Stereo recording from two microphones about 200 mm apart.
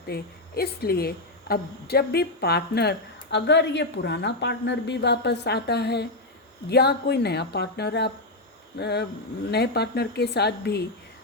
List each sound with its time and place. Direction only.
0.1 s a woman's voice: 50° left (ahead or behind)